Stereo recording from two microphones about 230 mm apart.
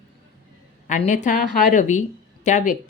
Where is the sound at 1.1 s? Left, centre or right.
Left.